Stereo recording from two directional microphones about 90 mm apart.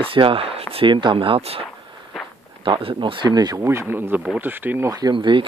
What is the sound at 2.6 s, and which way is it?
Speech, 70° right (ahead or behind).